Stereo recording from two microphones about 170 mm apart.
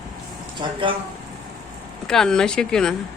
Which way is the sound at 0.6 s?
30° right (ahead or behind).